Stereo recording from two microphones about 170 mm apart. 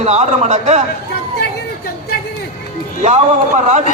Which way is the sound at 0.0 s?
40° right (ahead or behind).